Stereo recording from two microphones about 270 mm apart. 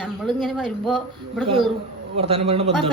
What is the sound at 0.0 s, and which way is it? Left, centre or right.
A woman's voice, centre.